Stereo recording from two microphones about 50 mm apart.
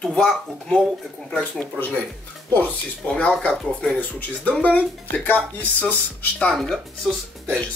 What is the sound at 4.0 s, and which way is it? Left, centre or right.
Speech, left.